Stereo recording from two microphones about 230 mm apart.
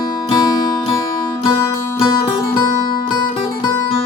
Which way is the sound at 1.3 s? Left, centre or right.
Centre.